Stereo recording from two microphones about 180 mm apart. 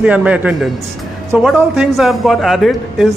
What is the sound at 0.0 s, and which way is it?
A man's voice, 5° right (ahead or behind).